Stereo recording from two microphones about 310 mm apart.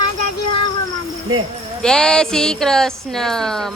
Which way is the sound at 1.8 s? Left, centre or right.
Centre.